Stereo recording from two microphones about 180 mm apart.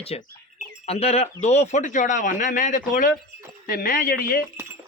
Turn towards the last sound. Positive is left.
turn(degrees=50)  # may be behind; listen again after turning